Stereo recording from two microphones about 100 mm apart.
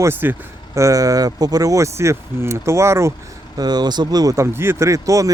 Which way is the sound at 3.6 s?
45° right (ahead or behind).